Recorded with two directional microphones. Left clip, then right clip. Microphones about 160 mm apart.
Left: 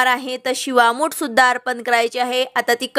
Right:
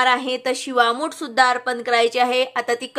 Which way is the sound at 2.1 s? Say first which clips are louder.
Even; 30° left (ahead or behind).